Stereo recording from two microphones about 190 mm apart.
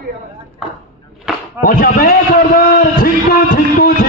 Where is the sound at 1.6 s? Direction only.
50° left (ahead or behind).